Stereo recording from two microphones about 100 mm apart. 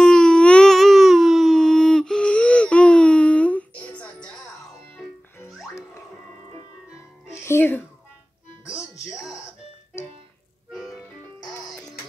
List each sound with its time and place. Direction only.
0.0 s a sound: 5° left (ahead or behind)
7.4 s music: 20° left (ahead or behind)
10.7 s music: centre (ahead or behind)